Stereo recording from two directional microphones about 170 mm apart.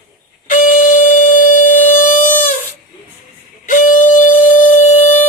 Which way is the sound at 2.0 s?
50° left (ahead or behind).